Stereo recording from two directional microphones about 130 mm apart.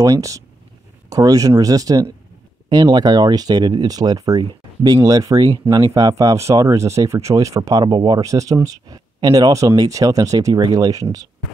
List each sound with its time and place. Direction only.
0.0 s speech: 25° right (ahead or behind)